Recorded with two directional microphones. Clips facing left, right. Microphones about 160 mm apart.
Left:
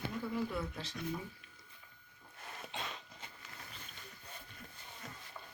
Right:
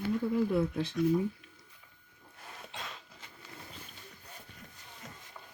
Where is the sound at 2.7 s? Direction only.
Centre (ahead or behind).